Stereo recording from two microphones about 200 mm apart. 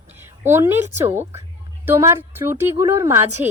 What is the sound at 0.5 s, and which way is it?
A woman's voice, 10° right (ahead or behind).